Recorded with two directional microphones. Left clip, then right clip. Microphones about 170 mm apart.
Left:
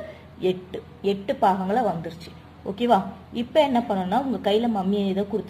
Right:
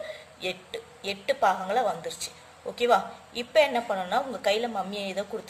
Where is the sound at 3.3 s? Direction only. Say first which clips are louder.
Left 2 dB; 10° right (ahead or behind).